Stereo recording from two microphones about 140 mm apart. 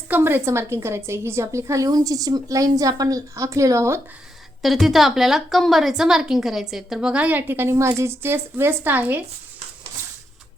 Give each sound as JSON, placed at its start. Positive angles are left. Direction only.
{"t": 0.1, "sound": "a woman's voice", "side_deg": -15}
{"t": 4.6, "sound": "a woman's voice", "side_deg": 0}